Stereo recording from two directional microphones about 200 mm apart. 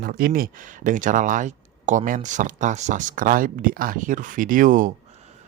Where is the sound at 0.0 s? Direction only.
45° right (ahead or behind).